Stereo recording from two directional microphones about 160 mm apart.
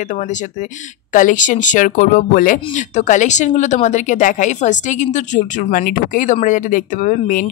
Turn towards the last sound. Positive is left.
turn(degrees=55)  # may be behind; listen again after turning